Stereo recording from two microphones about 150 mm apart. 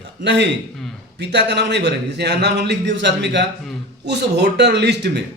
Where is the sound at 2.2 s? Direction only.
90° right.